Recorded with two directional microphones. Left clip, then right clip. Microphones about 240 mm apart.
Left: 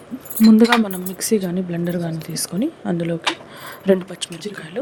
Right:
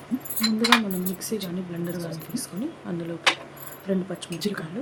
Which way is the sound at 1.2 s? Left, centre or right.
Left.